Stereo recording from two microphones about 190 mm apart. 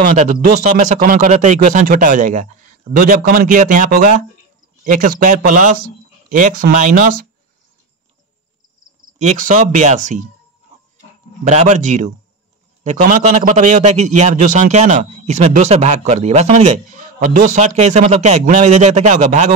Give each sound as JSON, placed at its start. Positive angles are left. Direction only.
{"t": 0.0, "sound": "a man's voice", "side_deg": -40}
{"t": 9.2, "sound": "a man's voice", "side_deg": -40}
{"t": 11.4, "sound": "a man's voice", "side_deg": -40}